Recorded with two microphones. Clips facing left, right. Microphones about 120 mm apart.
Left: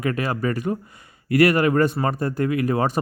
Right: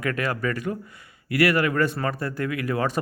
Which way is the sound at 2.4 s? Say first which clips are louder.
Left 5 dB; 30° left (ahead or behind).